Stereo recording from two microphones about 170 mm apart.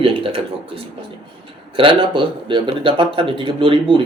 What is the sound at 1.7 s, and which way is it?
Speech, 30° right (ahead or behind).